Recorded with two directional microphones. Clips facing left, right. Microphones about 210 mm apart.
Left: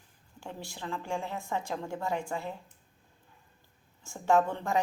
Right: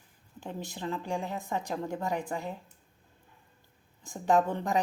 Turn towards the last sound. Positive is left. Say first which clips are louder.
# even
turn(degrees=-15)  # may be behind; listen again after turning